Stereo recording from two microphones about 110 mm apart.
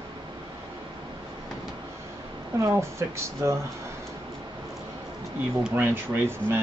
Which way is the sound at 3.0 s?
25° right (ahead or behind).